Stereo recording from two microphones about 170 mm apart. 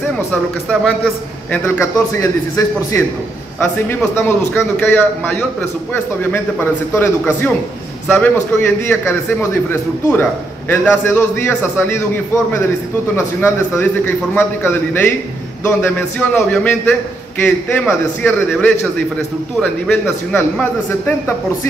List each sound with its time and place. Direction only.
0.3 s speech: centre (ahead or behind)
1.5 s a man's voice: 15° left (ahead or behind)
13.1 s a man's voice: 15° left (ahead or behind)
19.6 s a man's voice: 5° left (ahead or behind)